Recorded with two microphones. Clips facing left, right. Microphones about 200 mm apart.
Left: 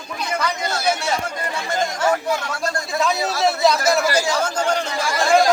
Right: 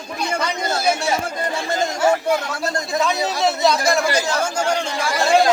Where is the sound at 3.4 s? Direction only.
5° left (ahead or behind).